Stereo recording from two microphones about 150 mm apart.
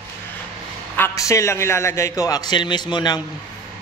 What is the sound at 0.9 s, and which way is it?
Speech, 15° left (ahead or behind).